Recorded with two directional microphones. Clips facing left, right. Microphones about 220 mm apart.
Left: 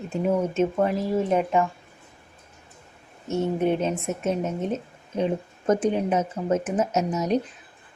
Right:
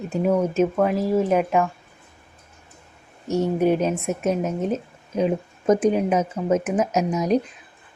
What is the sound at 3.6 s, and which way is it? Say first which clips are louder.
Speech: right 3 dB; 10° right (ahead or behind).